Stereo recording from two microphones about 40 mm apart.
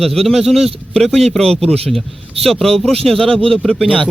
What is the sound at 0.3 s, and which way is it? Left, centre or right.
Speech, centre.